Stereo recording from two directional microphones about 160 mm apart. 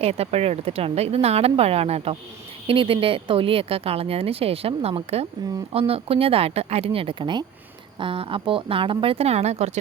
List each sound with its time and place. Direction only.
0.0 s speech: 40° right (ahead or behind)